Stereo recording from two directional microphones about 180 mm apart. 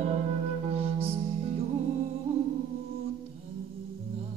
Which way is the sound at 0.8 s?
35° right (ahead or behind).